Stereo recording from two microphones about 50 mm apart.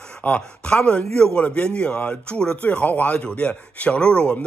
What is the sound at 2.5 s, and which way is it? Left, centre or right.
Speech, left.